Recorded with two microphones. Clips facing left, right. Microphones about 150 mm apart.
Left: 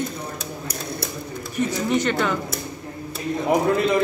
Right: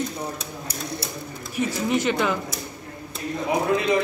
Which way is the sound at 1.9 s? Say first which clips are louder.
Even; 5° right (ahead or behind).